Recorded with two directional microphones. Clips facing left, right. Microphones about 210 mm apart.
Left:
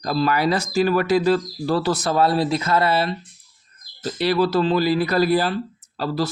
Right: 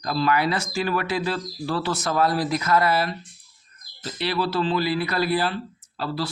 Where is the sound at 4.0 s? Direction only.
45° left (ahead or behind).